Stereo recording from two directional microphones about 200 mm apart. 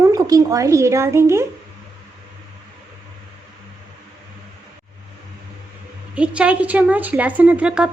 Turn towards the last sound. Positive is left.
turn(degrees=-5)  # may be behind; listen again after turning